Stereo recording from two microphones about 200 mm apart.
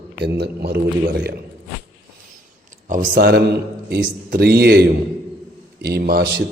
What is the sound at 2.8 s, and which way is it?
Speech, 40° right (ahead or behind).